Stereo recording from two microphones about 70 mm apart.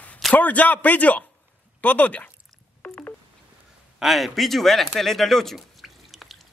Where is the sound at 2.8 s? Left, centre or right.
Left.